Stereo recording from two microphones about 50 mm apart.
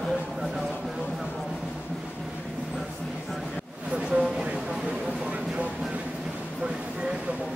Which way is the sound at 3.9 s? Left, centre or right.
Right.